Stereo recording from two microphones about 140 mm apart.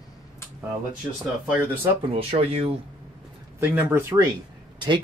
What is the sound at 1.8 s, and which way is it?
Speech, 45° right (ahead or behind).